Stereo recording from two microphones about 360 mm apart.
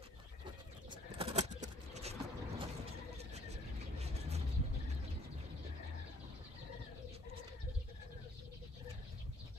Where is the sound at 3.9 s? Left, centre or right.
Centre.